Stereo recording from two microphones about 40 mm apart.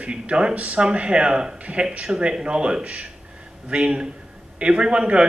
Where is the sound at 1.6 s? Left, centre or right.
Right.